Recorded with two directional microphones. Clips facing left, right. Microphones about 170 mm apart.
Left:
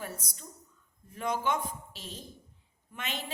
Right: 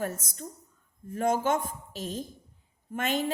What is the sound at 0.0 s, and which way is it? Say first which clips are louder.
Speech: right 8 dB; 45° right (ahead or behind).